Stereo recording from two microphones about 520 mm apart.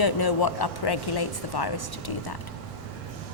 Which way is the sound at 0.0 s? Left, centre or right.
Left.